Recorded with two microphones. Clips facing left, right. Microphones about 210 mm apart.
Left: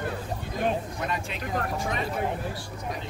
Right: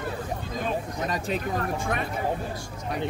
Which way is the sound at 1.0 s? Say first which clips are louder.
Right 4 dB; 40° right (ahead or behind).